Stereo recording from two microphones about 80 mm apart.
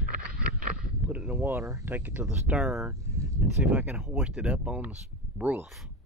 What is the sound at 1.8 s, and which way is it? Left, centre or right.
Speech, right.